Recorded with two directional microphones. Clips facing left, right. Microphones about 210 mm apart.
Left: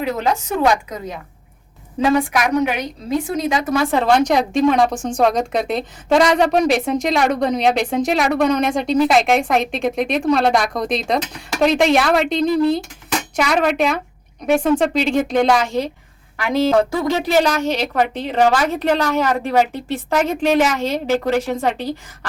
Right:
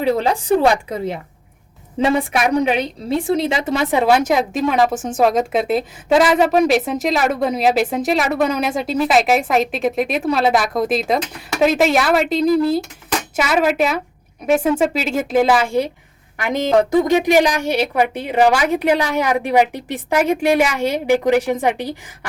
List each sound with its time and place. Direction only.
0.0 s a woman's voice: 30° right (ahead or behind); by 22.3 s 15° right (ahead or behind)